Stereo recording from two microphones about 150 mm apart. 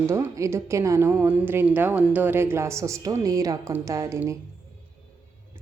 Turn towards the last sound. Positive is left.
turn(degrees=-20)  # may be behind; listen again after turning